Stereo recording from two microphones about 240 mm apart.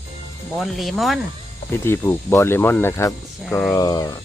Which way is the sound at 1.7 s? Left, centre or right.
Centre.